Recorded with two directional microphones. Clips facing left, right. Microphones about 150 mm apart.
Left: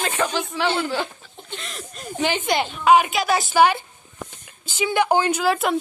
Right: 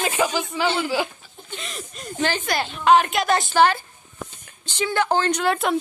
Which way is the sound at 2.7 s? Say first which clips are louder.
Even; 10° left (ahead or behind).